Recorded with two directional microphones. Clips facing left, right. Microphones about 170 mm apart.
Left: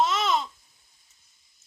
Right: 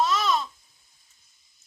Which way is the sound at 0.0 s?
20° left (ahead or behind).